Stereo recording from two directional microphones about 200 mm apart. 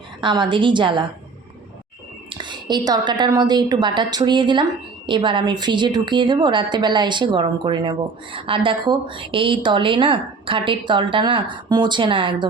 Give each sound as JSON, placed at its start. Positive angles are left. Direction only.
{"t": 0.2, "sound": "a woman's voice", "side_deg": -25}
{"t": 2.3, "sound": "a woman's voice", "side_deg": -25}